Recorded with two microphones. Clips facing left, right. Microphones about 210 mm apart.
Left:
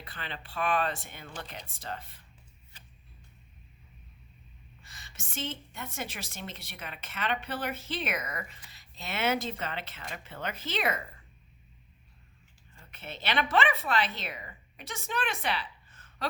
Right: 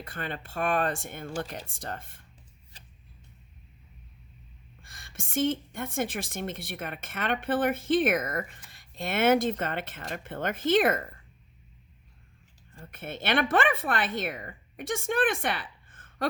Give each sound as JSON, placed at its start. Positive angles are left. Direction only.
{"t": 0.0, "sound": "a woman's voice", "side_deg": -50}
{"t": 4.8, "sound": "a woman's voice", "side_deg": -50}
{"t": 12.7, "sound": "a woman's voice", "side_deg": -50}